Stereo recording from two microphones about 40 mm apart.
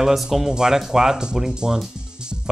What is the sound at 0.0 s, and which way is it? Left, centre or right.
Speech, centre.